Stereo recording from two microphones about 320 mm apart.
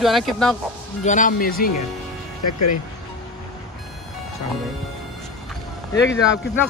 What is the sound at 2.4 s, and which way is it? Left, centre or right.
Speech, left.